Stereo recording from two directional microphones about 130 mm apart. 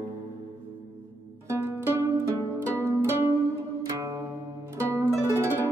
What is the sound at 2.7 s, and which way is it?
Music, 20° right (ahead or behind).